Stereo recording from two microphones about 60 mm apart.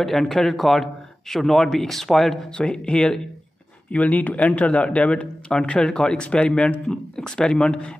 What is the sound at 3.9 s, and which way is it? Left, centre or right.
A man's voice, left.